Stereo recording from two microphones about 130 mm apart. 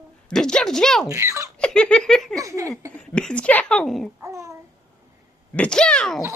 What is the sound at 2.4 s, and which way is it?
Speech, 25° right (ahead or behind).